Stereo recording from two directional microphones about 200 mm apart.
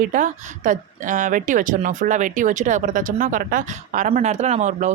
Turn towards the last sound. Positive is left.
turn(degrees=-35)  # may be behind; listen again after turning